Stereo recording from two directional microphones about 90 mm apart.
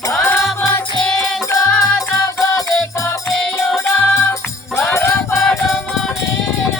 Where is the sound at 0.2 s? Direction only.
25° left (ahead or behind).